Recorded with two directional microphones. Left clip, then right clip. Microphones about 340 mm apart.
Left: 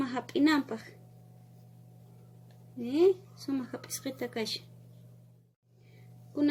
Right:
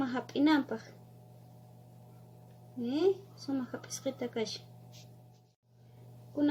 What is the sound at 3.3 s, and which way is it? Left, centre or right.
Speech, left.